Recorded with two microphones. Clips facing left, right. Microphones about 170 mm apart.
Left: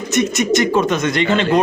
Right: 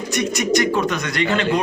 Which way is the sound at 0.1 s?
20° left (ahead or behind).